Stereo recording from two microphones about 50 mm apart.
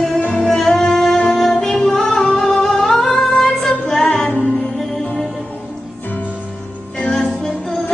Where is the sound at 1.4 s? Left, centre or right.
Centre.